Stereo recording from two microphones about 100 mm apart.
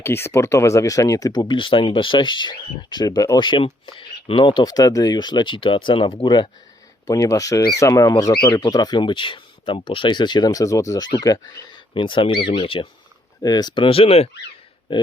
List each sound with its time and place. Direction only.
0.0 s speech: 25° left (ahead or behind)
3.4 s speech: 55° left (ahead or behind)
7.1 s speech: 35° left (ahead or behind)
8.3 s speech: 45° left (ahead or behind)
11.9 s speech: 55° left (ahead or behind)
13.4 s speech: 40° left (ahead or behind); by 14.3 s 75° left (ahead or behind)
14.9 s speech: 55° left (ahead or behind)